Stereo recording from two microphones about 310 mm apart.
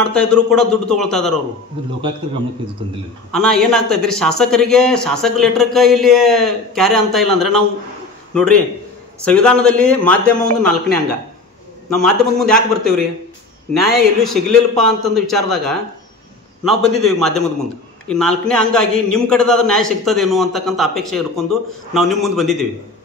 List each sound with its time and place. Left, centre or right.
0.0 s a man's voice: centre
3.3 s a man's voice: centre
16.6 s a man's voice: centre